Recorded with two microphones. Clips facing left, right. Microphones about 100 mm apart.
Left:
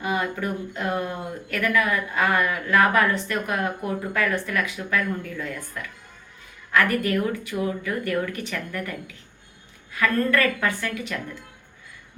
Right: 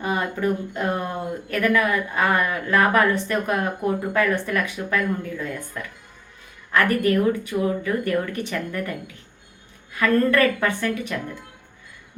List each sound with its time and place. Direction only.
0.0 s speech: 30° right (ahead or behind)
6.7 s speech: 25° right (ahead or behind)
10.0 s speech: 30° right (ahead or behind)